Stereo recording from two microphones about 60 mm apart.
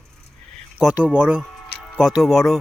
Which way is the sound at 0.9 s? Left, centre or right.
Centre.